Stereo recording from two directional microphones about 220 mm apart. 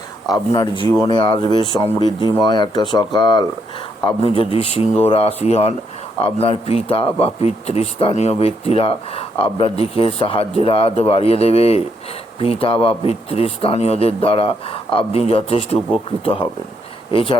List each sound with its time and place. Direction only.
0.5 s speech: 20° left (ahead or behind)